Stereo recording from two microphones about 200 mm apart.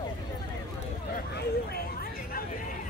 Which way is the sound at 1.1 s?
50° left (ahead or behind).